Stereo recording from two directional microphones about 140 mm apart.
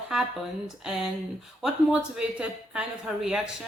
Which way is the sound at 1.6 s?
10° right (ahead or behind).